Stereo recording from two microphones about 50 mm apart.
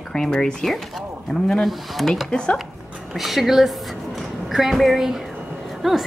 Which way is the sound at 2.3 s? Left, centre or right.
Centre.